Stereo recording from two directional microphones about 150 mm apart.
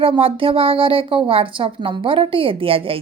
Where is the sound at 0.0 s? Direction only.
35° right (ahead or behind).